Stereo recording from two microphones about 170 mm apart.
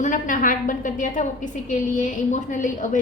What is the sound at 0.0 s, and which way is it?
A woman's voice, 50° left (ahead or behind).